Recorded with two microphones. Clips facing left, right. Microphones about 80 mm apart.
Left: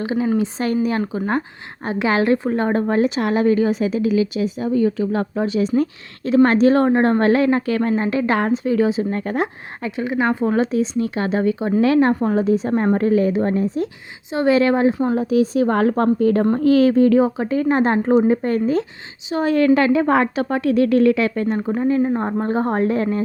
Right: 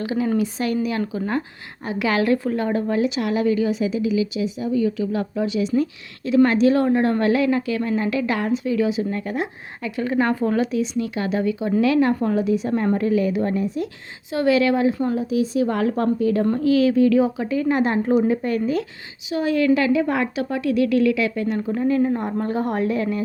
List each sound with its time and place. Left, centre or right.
0.0 s a woman's voice: left
7.9 s a woman's voice: left
10.0 s a woman's voice: centre; by 14.9 s left
15.1 s a woman's voice: left
21.8 s a woman's voice: left